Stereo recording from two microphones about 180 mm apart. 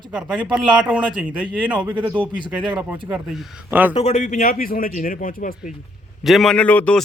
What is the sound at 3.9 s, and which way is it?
A man's voice, 35° left (ahead or behind).